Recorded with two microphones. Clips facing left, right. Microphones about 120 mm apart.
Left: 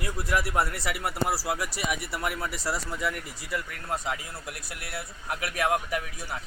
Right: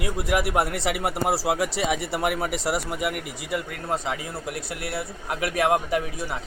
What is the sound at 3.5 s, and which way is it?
A man's voice, 25° right (ahead or behind).